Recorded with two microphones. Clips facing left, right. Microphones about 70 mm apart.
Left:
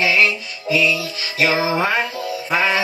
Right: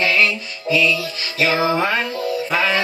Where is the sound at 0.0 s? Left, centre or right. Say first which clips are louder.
Left 1 dB; centre.